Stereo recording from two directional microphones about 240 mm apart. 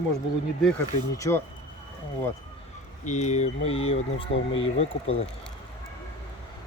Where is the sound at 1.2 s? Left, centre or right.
Centre.